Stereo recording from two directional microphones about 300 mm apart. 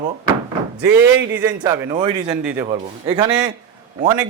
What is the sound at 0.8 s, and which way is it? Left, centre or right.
A man's voice, centre.